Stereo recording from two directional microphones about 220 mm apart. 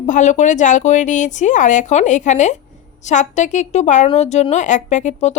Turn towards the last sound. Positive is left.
turn(degrees=35)  # may be behind; listen again after turning